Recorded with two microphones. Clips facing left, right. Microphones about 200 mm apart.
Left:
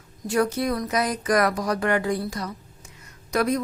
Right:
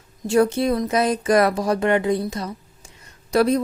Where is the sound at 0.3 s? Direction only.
25° right (ahead or behind).